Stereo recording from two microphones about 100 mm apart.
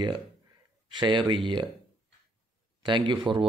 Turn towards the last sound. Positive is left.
turn(degrees=-55)  # may be behind; listen again after turning